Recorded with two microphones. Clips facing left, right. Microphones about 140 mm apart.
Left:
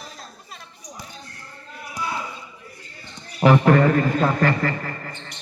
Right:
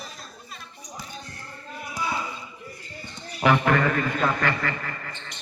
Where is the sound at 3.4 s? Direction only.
35° left (ahead or behind).